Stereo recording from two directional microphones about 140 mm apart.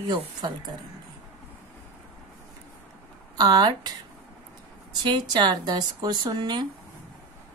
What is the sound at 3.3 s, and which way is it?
Speech, 30° right (ahead or behind).